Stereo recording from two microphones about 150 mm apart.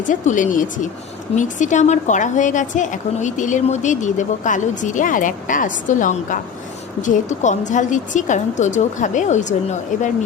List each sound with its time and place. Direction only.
0.1 s a woman's voice: 60° left (ahead or behind)